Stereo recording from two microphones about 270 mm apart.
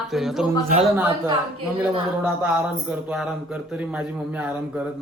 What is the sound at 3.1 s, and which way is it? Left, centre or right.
A man's voice, centre.